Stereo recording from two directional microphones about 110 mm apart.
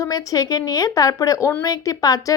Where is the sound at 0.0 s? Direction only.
30° left (ahead or behind).